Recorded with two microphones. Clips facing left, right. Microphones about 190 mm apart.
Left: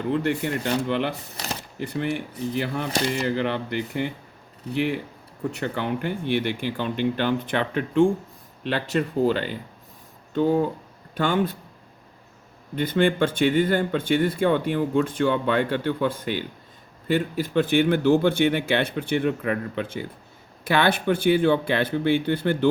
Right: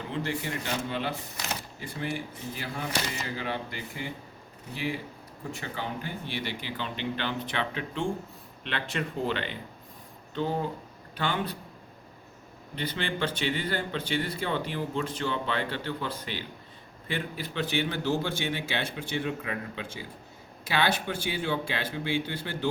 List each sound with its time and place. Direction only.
0.1 s speech: 60° left (ahead or behind)
8.6 s speech: 40° left (ahead or behind)
12.7 s speech: 50° left (ahead or behind)